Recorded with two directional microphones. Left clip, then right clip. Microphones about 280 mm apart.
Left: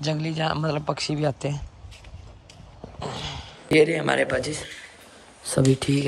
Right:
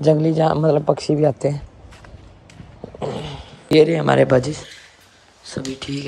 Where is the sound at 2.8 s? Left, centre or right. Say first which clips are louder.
Right 6 dB; left.